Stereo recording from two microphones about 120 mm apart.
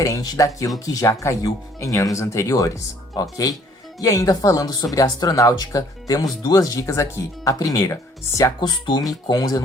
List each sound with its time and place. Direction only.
0.0 s speech: 25° left (ahead or behind)
8.6 s speech: 35° left (ahead or behind)